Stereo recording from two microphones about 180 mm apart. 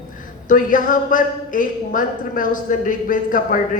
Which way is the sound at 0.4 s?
50° left (ahead or behind).